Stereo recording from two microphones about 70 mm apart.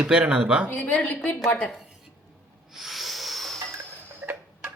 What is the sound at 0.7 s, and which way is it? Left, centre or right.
A woman's voice, left.